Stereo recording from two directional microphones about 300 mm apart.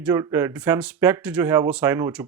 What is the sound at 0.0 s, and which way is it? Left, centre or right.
Speech, centre.